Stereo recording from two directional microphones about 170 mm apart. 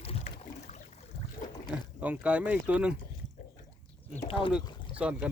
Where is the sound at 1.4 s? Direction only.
55° left (ahead or behind).